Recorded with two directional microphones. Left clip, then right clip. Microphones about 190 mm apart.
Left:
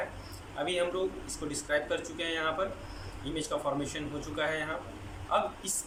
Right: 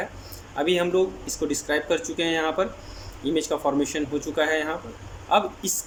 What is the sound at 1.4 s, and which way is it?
Speech, 45° right (ahead or behind).